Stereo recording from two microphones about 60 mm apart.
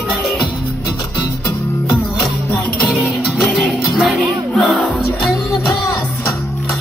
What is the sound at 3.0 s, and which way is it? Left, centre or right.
Music, centre.